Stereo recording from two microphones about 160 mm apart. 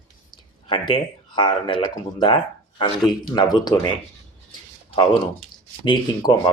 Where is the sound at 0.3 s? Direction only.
30° left (ahead or behind).